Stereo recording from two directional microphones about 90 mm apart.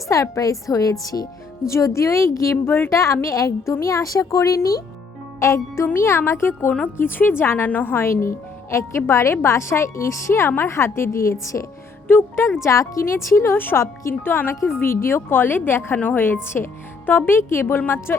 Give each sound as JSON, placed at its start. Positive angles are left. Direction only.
{"t": 0.1, "sound": "speech", "side_deg": 40}
{"t": 12.0, "sound": "speech", "side_deg": 20}
{"t": 12.6, "sound": "speech", "side_deg": 35}